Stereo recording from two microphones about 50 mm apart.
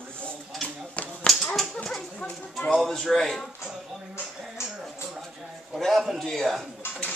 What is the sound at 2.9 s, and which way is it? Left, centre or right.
Speech, centre.